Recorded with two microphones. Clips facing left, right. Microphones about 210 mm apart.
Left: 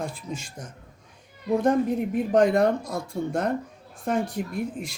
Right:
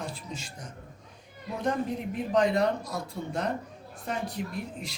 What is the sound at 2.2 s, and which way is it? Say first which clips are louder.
Speech: left 5 dB; 50° left (ahead or behind).